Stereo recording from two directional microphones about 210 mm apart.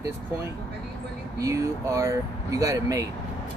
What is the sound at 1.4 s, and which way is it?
Speech, 15° right (ahead or behind).